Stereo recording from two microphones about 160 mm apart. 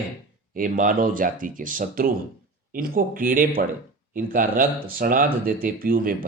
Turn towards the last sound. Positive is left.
turn(degrees=-60)  # may be behind; listen again after turning